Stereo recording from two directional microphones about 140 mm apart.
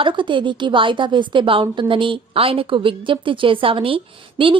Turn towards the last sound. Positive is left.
turn(degrees=-40)  # may be behind; listen again after turning